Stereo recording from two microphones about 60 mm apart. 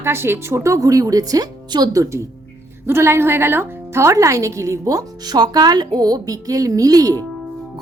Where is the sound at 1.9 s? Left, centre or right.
Right.